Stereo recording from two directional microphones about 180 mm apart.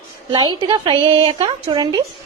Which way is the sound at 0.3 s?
25° right (ahead or behind).